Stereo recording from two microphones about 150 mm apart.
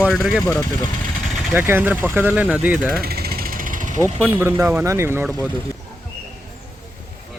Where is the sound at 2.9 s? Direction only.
90° right; by 4.0 s 60° right (ahead or behind).